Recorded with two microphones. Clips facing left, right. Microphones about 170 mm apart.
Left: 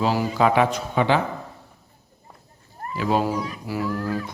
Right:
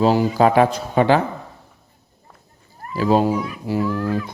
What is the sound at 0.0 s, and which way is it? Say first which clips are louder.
A man's voice: right 5 dB; 30° right (ahead or behind).